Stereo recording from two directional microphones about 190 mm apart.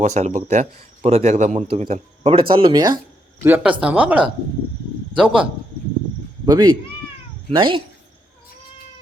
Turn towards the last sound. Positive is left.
turn(degrees=-25)  # may be behind; listen again after turning